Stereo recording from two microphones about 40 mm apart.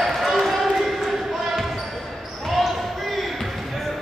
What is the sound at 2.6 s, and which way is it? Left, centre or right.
Basketball bounce, centre.